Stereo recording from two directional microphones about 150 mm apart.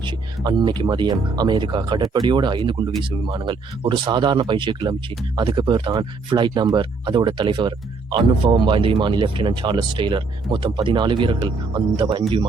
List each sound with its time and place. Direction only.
0.0 s speech: 30° right (ahead or behind)